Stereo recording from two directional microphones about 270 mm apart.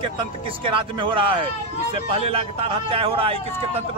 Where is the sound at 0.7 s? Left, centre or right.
Centre.